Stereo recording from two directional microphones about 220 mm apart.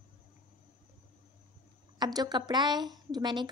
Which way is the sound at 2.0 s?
20° right (ahead or behind).